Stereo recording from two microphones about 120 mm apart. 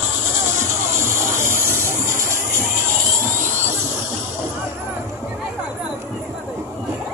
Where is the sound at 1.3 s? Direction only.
20° right (ahead or behind).